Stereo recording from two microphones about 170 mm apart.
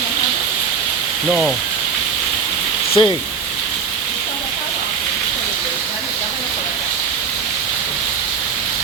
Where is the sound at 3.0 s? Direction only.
30° left (ahead or behind).